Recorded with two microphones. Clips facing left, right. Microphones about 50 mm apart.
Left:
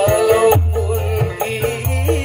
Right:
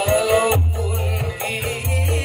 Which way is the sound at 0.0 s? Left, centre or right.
Left.